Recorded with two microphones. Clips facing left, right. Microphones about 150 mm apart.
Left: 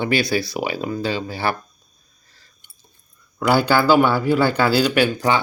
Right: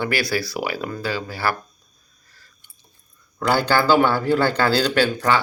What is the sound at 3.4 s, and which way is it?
Speech, 10° left (ahead or behind).